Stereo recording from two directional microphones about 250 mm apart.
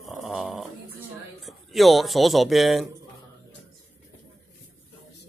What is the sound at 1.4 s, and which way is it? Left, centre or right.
Speech, centre.